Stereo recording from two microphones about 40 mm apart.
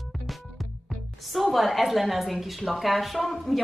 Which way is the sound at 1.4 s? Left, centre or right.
Centre.